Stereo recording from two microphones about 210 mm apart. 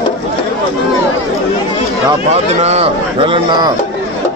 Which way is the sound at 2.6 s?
30° right (ahead or behind).